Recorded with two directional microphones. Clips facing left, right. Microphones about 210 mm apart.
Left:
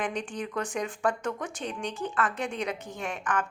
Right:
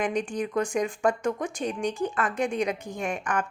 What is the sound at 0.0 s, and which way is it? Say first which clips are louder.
A woman's voice: right 5 dB; 10° right (ahead or behind).